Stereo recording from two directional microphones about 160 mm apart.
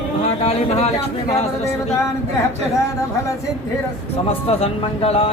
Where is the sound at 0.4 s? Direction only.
40° left (ahead or behind).